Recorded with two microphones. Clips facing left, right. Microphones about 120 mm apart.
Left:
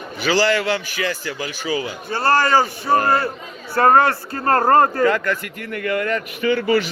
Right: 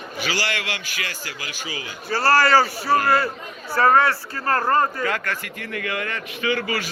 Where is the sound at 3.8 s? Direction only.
50° left (ahead or behind).